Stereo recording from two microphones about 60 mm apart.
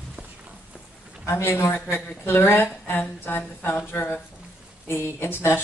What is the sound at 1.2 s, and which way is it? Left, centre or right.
A woman's voice, left.